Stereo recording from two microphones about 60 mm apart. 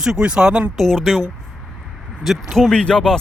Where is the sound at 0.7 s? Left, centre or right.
Centre.